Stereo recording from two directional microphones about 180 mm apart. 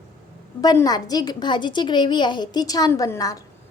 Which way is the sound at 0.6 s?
20° left (ahead or behind).